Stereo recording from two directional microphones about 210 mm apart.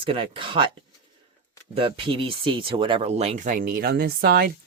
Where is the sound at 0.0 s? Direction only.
25° right (ahead or behind).